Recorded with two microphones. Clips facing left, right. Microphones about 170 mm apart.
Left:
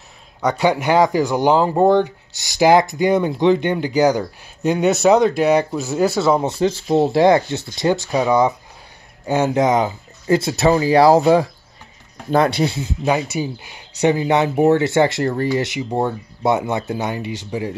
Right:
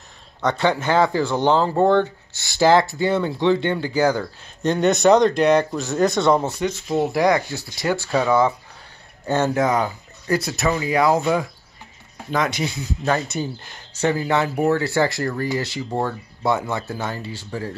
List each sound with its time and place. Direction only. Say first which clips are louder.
0.4 s speech: left 3 dB; 10° left (ahead or behind)
6.6 s speech: left 5 dB; 30° left (ahead or behind)
13.0 s speech: left 3 dB; 10° left (ahead or behind)